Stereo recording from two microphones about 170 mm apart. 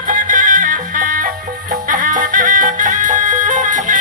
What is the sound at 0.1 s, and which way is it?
Music, 50° right (ahead or behind).